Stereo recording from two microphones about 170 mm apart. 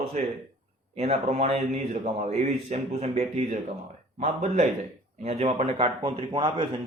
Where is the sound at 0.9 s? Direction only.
40° right (ahead or behind).